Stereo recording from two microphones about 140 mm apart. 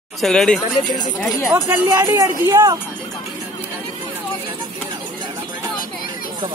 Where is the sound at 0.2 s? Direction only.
5° left (ahead or behind).